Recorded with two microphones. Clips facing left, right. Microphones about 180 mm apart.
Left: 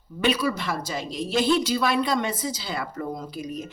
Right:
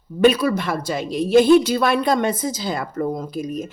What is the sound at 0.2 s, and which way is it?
Speech, 50° right (ahead or behind).